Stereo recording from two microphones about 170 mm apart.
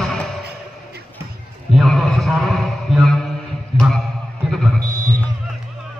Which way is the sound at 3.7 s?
35° left (ahead or behind).